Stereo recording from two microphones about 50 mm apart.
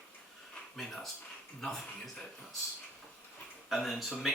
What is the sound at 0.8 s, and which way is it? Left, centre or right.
Speech, centre.